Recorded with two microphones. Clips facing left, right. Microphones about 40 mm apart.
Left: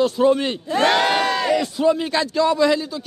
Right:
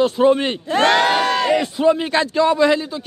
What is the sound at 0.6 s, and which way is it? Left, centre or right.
Speech, right.